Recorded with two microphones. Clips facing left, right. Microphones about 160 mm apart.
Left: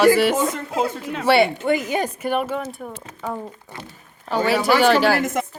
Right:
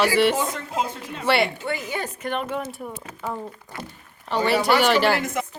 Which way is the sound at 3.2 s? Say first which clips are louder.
Left 2 dB; 15° left (ahead or behind).